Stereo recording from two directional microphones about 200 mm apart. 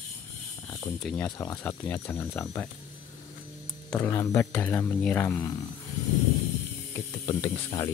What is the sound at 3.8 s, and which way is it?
Speech, 15° left (ahead or behind).